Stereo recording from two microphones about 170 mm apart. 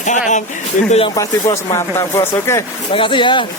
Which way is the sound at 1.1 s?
20° left (ahead or behind).